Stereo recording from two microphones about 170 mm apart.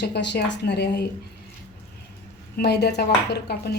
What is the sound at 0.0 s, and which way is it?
A woman's voice, 75° left (ahead or behind).